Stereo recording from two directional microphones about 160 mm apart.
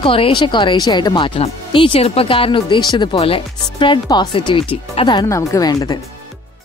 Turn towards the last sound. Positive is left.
turn(degrees=25)  # may be behind; listen again after turning